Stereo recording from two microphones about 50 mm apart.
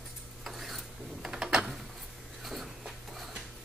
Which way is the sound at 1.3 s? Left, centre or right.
Centre.